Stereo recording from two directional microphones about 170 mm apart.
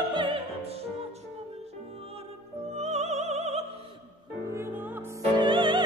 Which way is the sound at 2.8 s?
40° right (ahead or behind).